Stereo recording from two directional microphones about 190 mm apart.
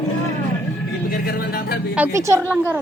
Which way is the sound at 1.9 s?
10° right (ahead or behind).